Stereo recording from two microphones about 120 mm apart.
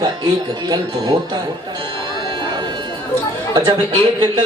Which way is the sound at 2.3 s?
40° right (ahead or behind).